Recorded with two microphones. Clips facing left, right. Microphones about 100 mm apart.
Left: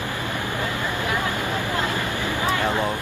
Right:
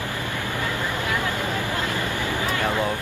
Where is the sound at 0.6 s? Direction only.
20° left (ahead or behind).